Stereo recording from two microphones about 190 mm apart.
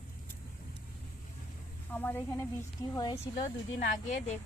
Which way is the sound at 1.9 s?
10° left (ahead or behind).